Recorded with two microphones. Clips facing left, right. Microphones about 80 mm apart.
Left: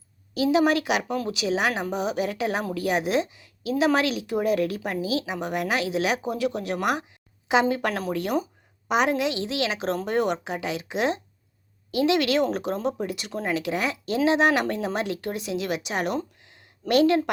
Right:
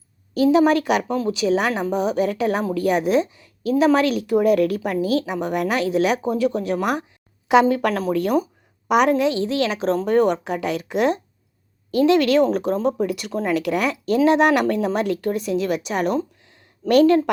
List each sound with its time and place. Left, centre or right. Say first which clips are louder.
0.3 s speech: right 5 dB; right
7.4 s a woman's voice: right 6 dB; right
9.3 s speech: right 6 dB; right
10.4 s speech: right 5 dB; right
11.9 s speech: right 6 dB; right
13.1 s speech: right 6 dB; right